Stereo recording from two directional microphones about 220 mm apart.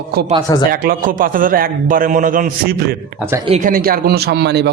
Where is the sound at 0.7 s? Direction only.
40° right (ahead or behind).